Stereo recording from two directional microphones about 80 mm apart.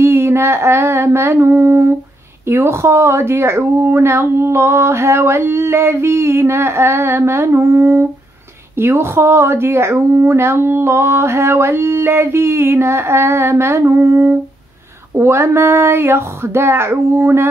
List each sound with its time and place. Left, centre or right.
0.0 s humming: right
2.4 s speech: right